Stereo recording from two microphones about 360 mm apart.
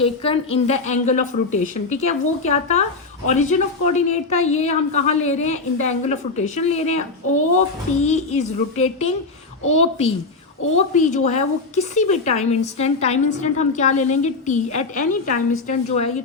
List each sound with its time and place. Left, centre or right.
0.0 s speech: centre
7.9 s music: centre
10.8 s speech: centre